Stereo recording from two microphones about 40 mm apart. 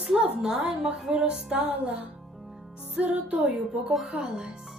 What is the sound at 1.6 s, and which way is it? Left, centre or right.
Music, right.